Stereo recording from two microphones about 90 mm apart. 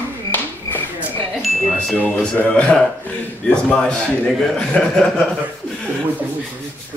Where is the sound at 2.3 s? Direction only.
15° left (ahead or behind).